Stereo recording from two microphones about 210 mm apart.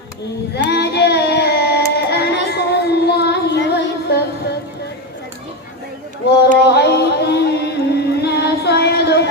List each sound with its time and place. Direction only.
0.7 s child singing: 50° left (ahead or behind)
6.7 s music: 50° left (ahead or behind)